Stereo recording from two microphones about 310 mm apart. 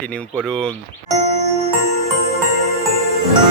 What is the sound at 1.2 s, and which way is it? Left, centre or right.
Music, centre.